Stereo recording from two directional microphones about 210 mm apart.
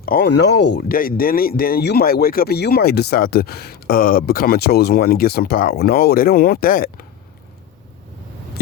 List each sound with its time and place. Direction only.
0.0 s speech: 45° left (ahead or behind)